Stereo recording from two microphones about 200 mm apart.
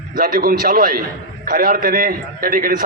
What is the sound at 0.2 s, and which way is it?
A man's voice, 45° right (ahead or behind).